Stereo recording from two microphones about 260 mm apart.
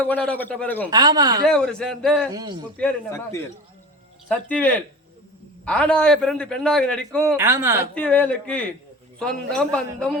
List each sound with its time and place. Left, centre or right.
0.0 s a man's voice: centre
0.9 s speech: centre
1.5 s a man's voice: centre
2.3 s speech: centre
2.7 s a man's voice: centre
7.3 s speech: centre
7.9 s a man's voice: centre